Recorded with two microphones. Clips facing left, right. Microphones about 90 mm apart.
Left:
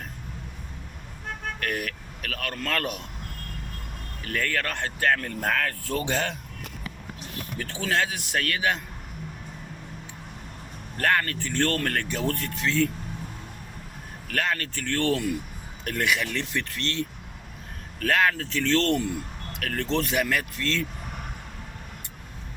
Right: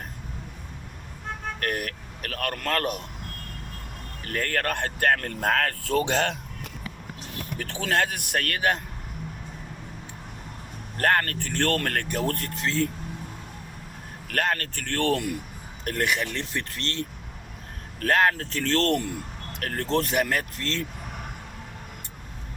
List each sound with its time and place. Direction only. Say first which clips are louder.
1.5 s speech: right 1 dB; 45° right (ahead or behind)
4.2 s speech: right 1 dB; 45° right (ahead or behind); by 6.3 s 90° right
7.6 s speech: right 1 dB; 60° right (ahead or behind)
10.9 s speech: right 1 dB; 45° right (ahead or behind)
14.3 s speech: right 1 dB; 50° right (ahead or behind)
15.8 s speech: even; 40° right (ahead or behind)
19.5 s speech: right 1 dB; 40° right (ahead or behind)